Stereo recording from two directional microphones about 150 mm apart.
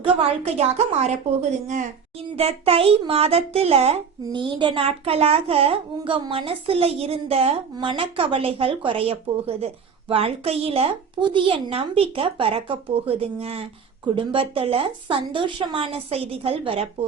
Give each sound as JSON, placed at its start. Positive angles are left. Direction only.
{"t": 0.0, "sound": "a woman's voice", "side_deg": -40}
{"t": 2.3, "sound": "a child's voice", "side_deg": -40}